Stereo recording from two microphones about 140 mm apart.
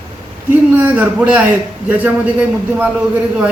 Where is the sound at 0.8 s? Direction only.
10° right (ahead or behind).